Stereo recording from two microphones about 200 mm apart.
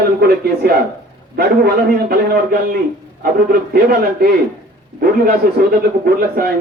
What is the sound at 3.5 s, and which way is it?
Speech, 50° right (ahead or behind).